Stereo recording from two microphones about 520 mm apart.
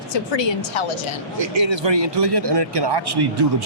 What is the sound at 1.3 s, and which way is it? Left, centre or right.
Speech, right.